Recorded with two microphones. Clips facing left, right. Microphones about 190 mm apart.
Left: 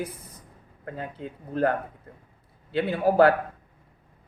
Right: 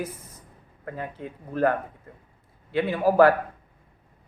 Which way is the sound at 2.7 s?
30° left (ahead or behind).